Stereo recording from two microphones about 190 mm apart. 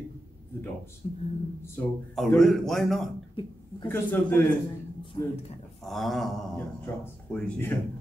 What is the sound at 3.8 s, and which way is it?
Speech, 10° left (ahead or behind).